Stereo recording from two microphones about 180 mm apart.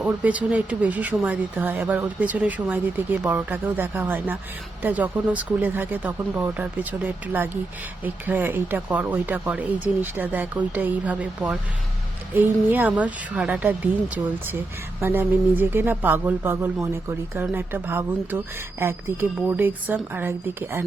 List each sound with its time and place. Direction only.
0.0 s speech: 10° right (ahead or behind)